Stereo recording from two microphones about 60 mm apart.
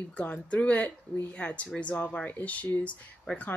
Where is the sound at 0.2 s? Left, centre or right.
Left.